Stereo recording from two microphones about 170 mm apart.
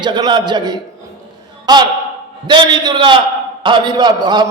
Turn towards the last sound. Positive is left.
turn(degrees=-25)  # may be behind; listen again after turning